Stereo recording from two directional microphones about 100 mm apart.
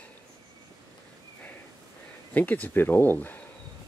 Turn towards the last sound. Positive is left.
turn(degrees=20)  # may be behind; listen again after turning